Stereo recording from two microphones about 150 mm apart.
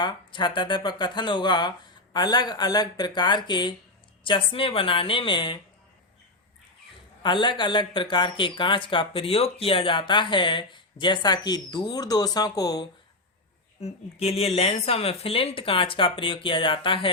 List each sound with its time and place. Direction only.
0.0 s speech: 30° left (ahead or behind)
7.2 s speech: 30° left (ahead or behind)
13.8 s speech: 45° left (ahead or behind)